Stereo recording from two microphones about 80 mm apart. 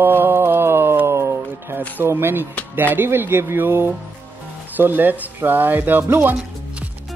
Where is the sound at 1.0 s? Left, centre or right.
Right.